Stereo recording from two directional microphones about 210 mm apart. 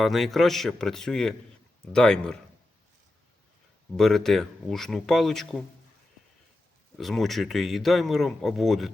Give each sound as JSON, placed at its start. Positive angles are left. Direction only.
{"t": 0.0, "sound": "speech", "side_deg": 0}
{"t": 3.9, "sound": "speech", "side_deg": 0}
{"t": 7.0, "sound": "speech", "side_deg": 0}